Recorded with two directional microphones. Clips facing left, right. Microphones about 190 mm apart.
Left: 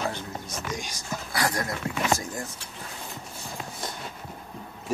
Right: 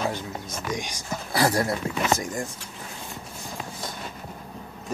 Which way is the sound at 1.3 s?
30° right (ahead or behind).